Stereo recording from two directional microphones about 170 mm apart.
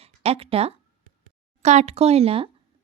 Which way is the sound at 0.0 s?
35° right (ahead or behind).